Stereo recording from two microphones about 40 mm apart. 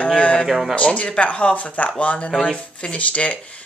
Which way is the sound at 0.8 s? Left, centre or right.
Left.